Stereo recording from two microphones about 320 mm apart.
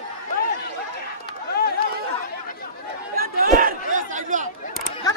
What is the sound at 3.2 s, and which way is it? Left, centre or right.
Chatter, right.